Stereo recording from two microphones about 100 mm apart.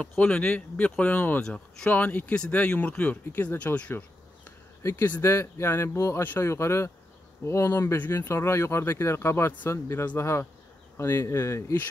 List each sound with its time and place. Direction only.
0.0 s speech: 10° left (ahead or behind)
4.8 s speech: 25° left (ahead or behind)